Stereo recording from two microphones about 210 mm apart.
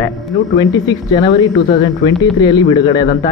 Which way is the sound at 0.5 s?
15° left (ahead or behind).